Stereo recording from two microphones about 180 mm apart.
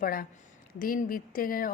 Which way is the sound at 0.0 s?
50° left (ahead or behind).